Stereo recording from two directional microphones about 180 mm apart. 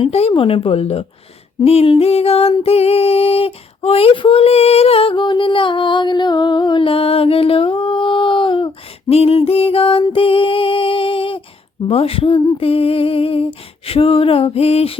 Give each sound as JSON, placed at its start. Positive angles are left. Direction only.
{"t": 0.0, "sound": "female singing", "side_deg": 35}